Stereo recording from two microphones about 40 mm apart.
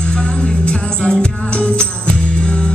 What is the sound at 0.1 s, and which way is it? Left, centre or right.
Music, left.